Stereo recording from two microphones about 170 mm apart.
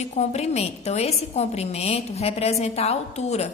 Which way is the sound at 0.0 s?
40° left (ahead or behind).